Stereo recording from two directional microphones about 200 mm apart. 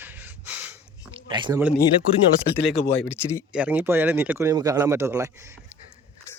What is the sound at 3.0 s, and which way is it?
Speech, 5° right (ahead or behind).